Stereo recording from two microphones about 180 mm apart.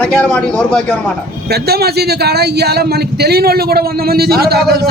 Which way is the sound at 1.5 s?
60° right (ahead or behind).